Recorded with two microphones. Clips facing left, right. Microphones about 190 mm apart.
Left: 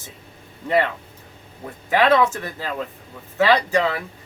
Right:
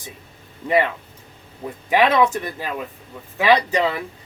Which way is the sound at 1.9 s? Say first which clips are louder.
Even; 15° right (ahead or behind).